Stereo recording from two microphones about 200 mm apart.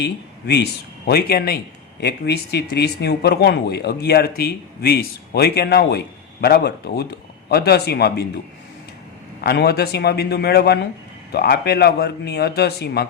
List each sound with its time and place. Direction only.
0.0 s speech: 55° left (ahead or behind)
9.4 s speech: 55° left (ahead or behind)